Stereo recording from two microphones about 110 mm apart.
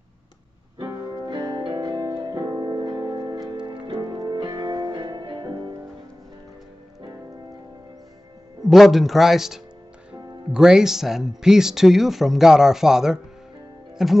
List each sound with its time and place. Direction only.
0.8 s music: 30° right (ahead or behind)
8.6 s speech: centre (ahead or behind)